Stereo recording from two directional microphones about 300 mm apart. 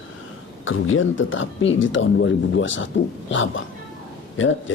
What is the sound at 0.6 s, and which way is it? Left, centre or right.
Speech, left.